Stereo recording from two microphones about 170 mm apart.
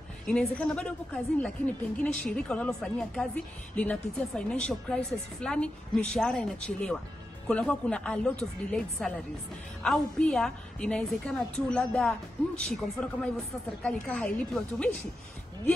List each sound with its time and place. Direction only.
0.3 s a woman's voice: 5° left (ahead or behind)